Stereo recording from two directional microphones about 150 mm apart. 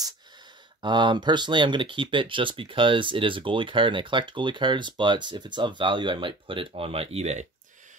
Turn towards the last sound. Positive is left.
turn(degrees=-50)  # may be behind; listen again after turning